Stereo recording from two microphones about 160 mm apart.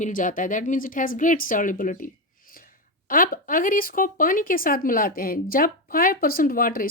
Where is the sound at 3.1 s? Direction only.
60° left (ahead or behind).